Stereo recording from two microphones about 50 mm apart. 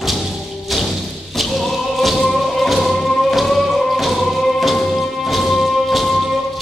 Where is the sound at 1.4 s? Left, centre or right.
Centre.